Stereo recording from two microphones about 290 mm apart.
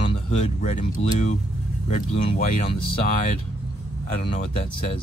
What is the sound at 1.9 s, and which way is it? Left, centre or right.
Speech, left.